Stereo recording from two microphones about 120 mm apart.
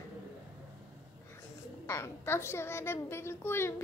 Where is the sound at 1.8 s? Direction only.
25° left (ahead or behind).